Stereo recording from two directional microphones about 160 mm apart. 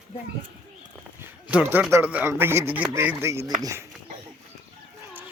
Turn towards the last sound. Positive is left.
turn(degrees=-15)  # may be behind; listen again after turning